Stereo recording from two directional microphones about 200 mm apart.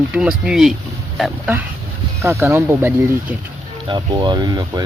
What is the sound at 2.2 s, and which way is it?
Speech, 15° right (ahead or behind).